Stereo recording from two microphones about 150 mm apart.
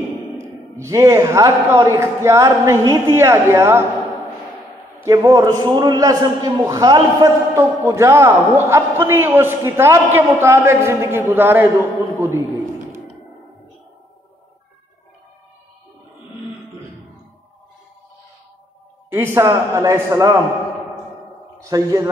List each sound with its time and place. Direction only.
0.4 s a man's voice: 20° right (ahead or behind)
5.0 s a man's voice: 20° right (ahead or behind)
19.0 s a man's voice: 20° right (ahead or behind)
21.5 s a man's voice: 25° right (ahead or behind)